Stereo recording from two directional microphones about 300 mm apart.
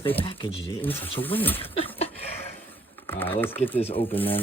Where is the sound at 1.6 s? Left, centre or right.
Centre.